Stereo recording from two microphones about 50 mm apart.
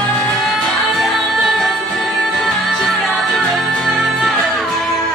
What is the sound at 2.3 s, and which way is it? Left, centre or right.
Music, centre.